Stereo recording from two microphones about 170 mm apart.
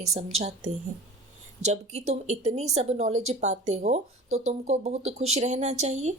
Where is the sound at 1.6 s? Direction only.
40° right (ahead or behind).